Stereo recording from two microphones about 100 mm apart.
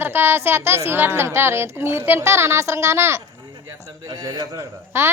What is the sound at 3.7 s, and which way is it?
A man's voice, 35° right (ahead or behind).